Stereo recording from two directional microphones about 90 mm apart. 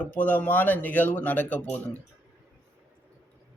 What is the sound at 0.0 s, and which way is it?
Speech, 20° left (ahead or behind).